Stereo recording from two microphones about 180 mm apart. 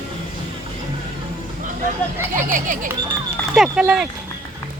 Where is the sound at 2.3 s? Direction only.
50° right (ahead or behind).